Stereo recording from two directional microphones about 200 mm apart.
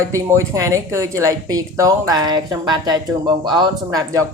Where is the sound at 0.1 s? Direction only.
15° right (ahead or behind).